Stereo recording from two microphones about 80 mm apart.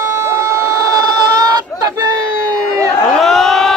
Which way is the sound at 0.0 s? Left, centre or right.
Right.